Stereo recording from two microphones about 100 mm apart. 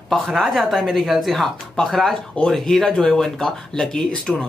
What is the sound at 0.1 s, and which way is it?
Speech, centre (ahead or behind).